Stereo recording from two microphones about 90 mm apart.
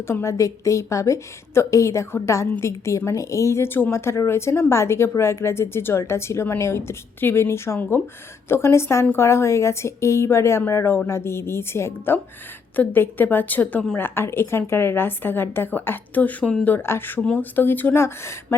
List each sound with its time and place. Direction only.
0.1 s a woman's voice: 30° left (ahead or behind)